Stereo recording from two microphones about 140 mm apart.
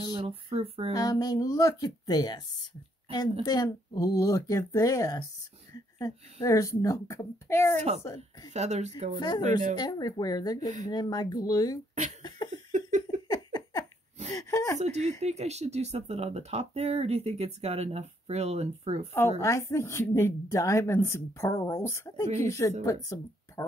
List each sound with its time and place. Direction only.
0.0 s speech: 40° right (ahead or behind)
0.9 s a woman's voice: 25° left (ahead or behind)
3.4 s a woman's voice: 30° left (ahead or behind)
6.4 s a woman's voice: 25° left (ahead or behind)
7.7 s speech: 50° right (ahead or behind)
9.8 s a woman's voice: 30° left (ahead or behind)
12.2 s laughter: 30° left (ahead or behind)
12.7 s a sound: 60° right (ahead or behind)
13.3 s a sound: 30° left (ahead or behind)
14.3 s a woman's voice: 20° left (ahead or behind)
14.8 s speech: 55° right (ahead or behind)
19.4 s a woman's voice: 20° left (ahead or behind)